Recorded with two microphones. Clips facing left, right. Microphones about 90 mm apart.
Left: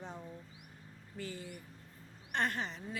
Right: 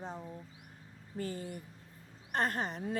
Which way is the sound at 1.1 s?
40° right (ahead or behind).